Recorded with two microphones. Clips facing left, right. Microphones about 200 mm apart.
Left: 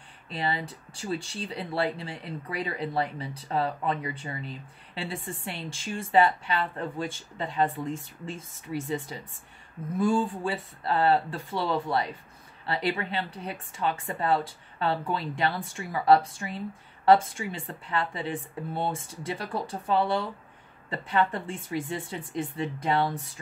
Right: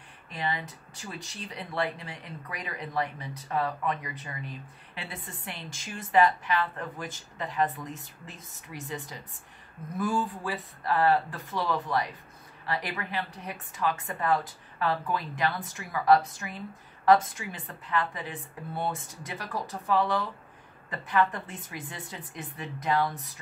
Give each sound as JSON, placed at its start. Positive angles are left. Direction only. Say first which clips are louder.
{"t": 0.3, "sound": "speech", "louder": "left 3 dB", "side_deg": 30}